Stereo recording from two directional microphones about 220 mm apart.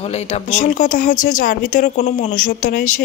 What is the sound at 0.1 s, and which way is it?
A woman's voice, 30° left (ahead or behind).